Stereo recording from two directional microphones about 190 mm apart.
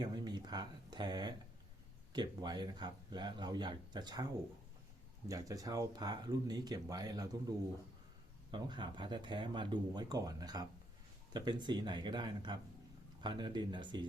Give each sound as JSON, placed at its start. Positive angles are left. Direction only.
{"t": 0.0, "sound": "speech", "side_deg": -20}
{"t": 5.3, "sound": "speech", "side_deg": -20}
{"t": 8.4, "sound": "speech", "side_deg": -25}